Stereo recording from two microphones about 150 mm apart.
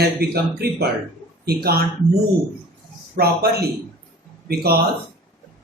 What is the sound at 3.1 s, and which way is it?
A man's voice, 90° right.